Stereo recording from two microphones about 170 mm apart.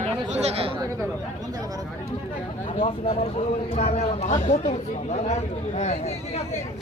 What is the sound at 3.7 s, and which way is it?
Speech, 40° left (ahead or behind).